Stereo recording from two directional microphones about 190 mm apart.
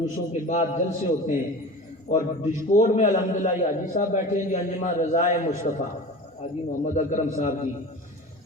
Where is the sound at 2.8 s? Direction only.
40° left (ahead or behind).